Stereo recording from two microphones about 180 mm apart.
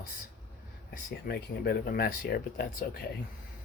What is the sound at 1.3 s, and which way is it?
Speech, 60° left (ahead or behind).